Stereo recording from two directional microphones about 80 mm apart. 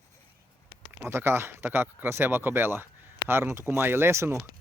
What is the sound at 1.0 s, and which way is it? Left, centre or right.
Speech, right.